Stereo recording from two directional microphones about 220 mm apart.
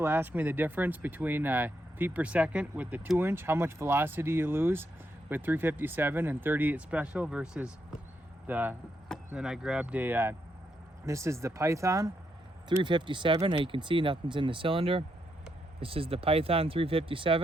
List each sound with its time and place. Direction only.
0.0 s speech: 10° right (ahead or behind); by 17.4 s 25° right (ahead or behind)